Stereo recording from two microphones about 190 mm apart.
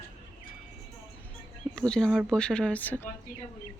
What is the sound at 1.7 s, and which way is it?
Speech, 5° left (ahead or behind).